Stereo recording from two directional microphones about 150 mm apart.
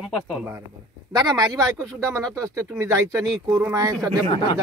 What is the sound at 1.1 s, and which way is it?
Speech, 25° right (ahead or behind).